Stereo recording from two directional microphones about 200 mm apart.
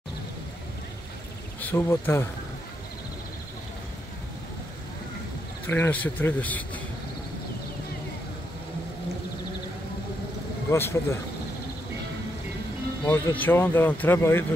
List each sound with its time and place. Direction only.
1.6 s speech: 10° left (ahead or behind)
5.7 s speech: 10° left (ahead or behind)
10.7 s speech: 10° left (ahead or behind)
13.0 s speech: 10° left (ahead or behind)